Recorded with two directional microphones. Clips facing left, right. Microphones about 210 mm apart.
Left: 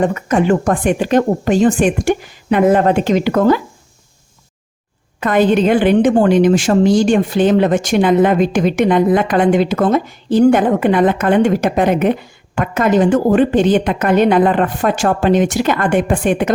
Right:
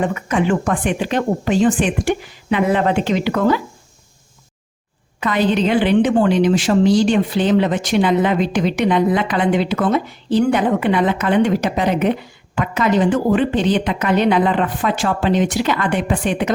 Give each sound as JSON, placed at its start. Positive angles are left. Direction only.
{"t": 0.0, "sound": "a woman's voice", "side_deg": 40}
{"t": 5.2, "sound": "a woman's voice", "side_deg": 50}